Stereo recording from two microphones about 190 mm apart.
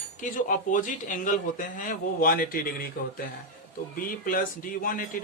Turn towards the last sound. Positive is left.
turn(degrees=45)  # may be behind; listen again after turning